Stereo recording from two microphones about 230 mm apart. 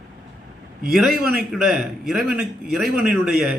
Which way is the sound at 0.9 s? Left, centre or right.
Centre.